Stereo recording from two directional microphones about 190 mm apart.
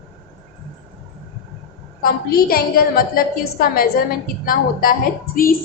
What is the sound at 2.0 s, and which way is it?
A woman's voice, 50° left (ahead or behind).